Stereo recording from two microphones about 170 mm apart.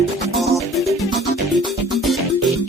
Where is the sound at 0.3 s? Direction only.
Centre (ahead or behind).